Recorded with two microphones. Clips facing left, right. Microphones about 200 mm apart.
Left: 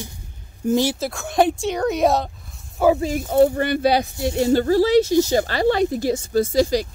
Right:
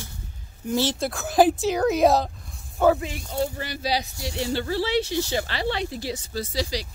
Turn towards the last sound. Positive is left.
turn(degrees=50)  # may be behind; listen again after turning